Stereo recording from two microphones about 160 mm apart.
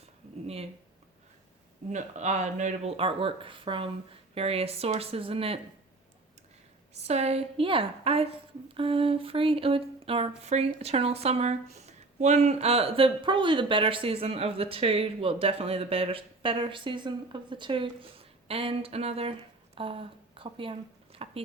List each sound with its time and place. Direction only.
0.4 s speech: 40° right (ahead or behind)
1.9 s speech: 50° right (ahead or behind)
6.9 s speech: 40° right (ahead or behind)